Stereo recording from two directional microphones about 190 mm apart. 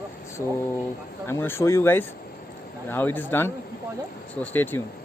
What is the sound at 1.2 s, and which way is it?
Speech, 10° left (ahead or behind).